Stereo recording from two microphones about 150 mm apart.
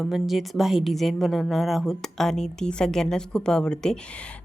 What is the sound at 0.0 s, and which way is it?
A woman's voice, centre (ahead or behind).